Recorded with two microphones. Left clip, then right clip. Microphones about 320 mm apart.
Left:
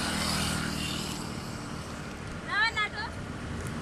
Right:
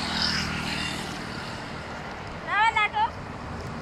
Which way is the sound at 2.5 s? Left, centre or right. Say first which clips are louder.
Right 6 dB; centre.